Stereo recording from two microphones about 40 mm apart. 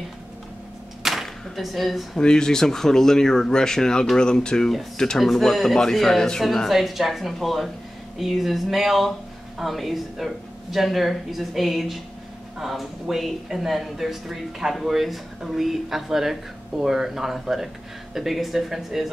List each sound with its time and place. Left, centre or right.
1.0 s a sound: centre
2.1 s speech: centre
5.2 s speech: centre